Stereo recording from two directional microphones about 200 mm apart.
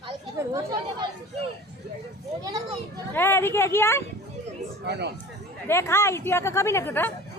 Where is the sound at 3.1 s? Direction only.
10° left (ahead or behind).